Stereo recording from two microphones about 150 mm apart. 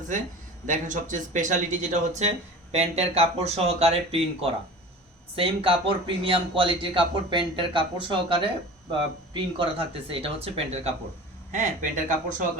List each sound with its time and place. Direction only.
0.7 s speech: 60° right (ahead or behind); by 10.9 s 45° right (ahead or behind)
11.5 s speech: 55° right (ahead or behind)